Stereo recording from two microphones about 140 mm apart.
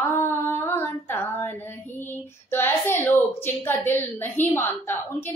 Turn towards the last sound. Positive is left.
turn(degrees=15)  # may be behind; listen again after turning